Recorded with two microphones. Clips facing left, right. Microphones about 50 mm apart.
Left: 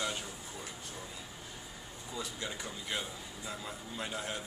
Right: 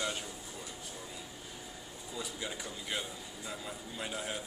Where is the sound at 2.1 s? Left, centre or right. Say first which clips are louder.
Even; centre.